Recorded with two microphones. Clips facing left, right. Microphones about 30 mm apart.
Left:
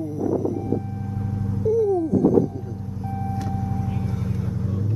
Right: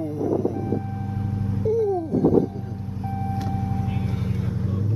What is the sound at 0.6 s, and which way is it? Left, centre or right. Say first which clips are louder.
Vehicle: left 1 dB; right.